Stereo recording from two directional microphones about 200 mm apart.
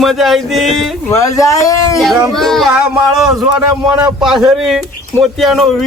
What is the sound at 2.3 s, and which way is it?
Speech, centre (ahead or behind).